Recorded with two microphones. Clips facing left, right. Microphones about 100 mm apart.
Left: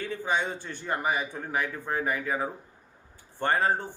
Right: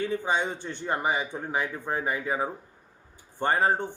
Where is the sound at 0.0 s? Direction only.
20° right (ahead or behind).